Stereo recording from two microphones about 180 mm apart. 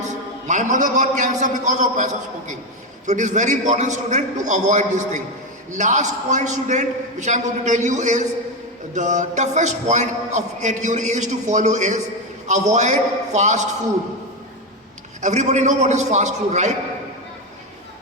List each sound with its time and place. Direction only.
0.1 s a man's voice: 40° right (ahead or behind)
15.2 s a man's voice: 40° right (ahead or behind)